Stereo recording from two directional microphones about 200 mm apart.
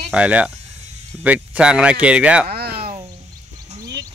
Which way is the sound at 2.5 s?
50° right (ahead or behind).